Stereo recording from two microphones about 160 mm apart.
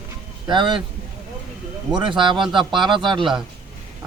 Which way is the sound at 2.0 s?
30° right (ahead or behind).